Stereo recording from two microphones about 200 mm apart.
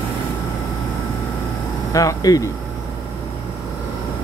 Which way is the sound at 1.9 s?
15° left (ahead or behind).